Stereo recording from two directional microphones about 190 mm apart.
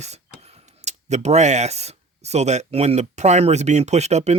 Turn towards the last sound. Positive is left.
turn(degrees=-35)  # may be behind; listen again after turning